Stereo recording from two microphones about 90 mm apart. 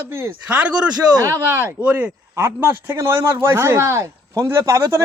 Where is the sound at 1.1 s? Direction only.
35° right (ahead or behind).